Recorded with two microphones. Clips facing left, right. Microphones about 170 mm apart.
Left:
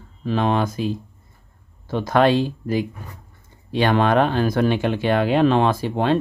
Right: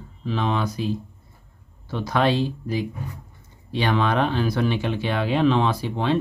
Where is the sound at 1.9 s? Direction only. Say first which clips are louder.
Left 5 dB; 50° left (ahead or behind).